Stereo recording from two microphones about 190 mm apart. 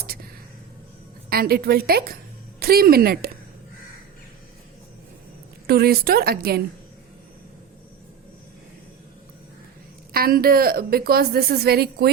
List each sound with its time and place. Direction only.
0.0 s a sound: 50° right (ahead or behind)
1.3 s a woman's voice: 55° right (ahead or behind)
5.6 s a woman's voice: 55° right (ahead or behind)
10.1 s a woman's voice: 50° right (ahead or behind)